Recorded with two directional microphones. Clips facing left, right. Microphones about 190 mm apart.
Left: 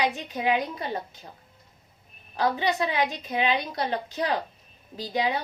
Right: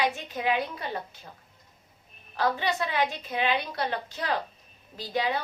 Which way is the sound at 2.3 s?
15° left (ahead or behind).